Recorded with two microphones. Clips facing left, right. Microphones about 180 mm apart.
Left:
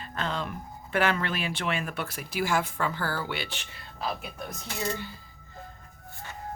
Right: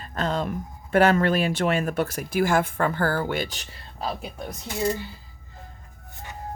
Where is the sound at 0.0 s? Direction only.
40° right (ahead or behind).